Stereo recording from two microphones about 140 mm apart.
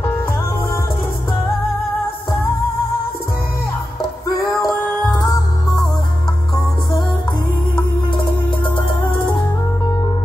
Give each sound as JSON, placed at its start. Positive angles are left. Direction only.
{"t": 4.6, "sound": "music", "side_deg": 0}
{"t": 7.7, "sound": "music", "side_deg": 35}